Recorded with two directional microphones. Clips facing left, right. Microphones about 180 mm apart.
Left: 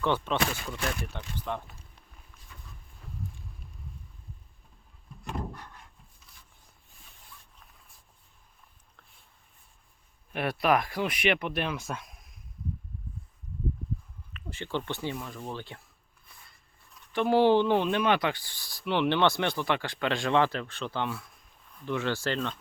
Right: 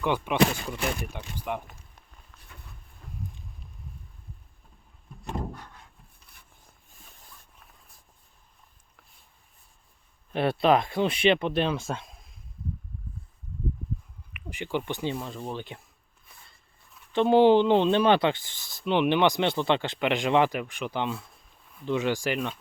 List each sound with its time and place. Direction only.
0.0 s speech: 15° right (ahead or behind)
10.3 s speech: 25° right (ahead or behind)
14.3 s speech: 15° right (ahead or behind)
15.1 s speech: 30° right (ahead or behind)
15.4 s speech: 15° right (ahead or behind)
17.1 s speech: 20° right (ahead or behind)